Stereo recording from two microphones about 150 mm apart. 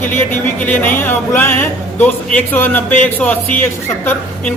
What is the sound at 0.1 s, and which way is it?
Speech, 10° left (ahead or behind).